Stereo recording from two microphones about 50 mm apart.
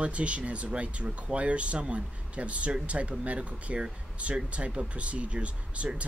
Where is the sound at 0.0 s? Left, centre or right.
Right.